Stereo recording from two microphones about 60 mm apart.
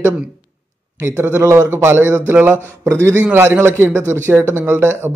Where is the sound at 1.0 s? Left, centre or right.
Right.